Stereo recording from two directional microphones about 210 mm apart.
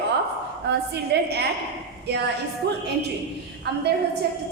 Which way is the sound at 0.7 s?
55° right (ahead or behind).